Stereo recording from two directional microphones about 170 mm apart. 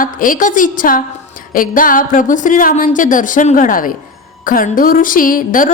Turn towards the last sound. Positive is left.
turn(degrees=50)  # may be behind; listen again after turning